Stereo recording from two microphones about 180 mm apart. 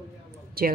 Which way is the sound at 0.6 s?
55° right (ahead or behind).